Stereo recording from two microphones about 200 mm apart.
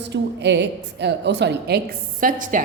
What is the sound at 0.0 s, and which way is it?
A woman's voice, 60° right (ahead or behind).